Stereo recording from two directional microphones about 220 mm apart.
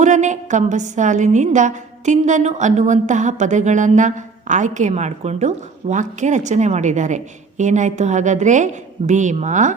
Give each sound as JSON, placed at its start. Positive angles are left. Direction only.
{"t": 0.0, "sound": "a woman's voice", "side_deg": -35}